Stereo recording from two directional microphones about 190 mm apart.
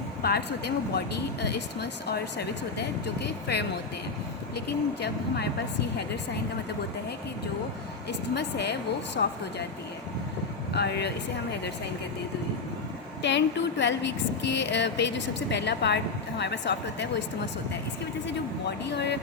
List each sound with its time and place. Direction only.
0.2 s speech: 55° left (ahead or behind)
8.4 s speech: 60° left (ahead or behind)
10.8 s speech: 60° left (ahead or behind)
13.2 s a woman's voice: 70° left (ahead or behind)
18.9 s speech: 65° left (ahead or behind)